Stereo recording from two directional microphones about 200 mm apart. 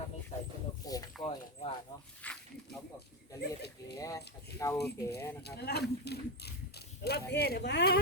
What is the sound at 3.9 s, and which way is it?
Clip-clop, 15° left (ahead or behind).